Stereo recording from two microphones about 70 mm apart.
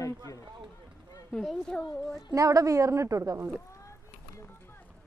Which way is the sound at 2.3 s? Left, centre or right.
Right.